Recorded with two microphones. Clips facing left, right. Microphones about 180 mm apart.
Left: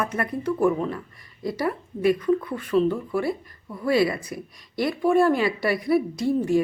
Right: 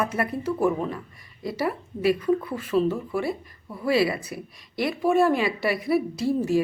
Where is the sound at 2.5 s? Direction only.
5° right (ahead or behind).